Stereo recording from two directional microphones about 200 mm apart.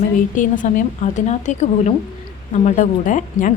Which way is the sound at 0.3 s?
40° left (ahead or behind).